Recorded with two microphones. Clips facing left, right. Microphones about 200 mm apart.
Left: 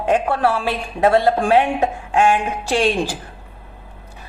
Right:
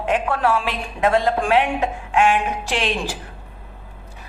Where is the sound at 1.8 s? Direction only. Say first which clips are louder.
Left 2 dB; 35° left (ahead or behind).